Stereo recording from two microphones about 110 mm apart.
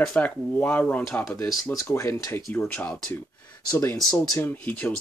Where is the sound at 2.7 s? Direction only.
15° left (ahead or behind).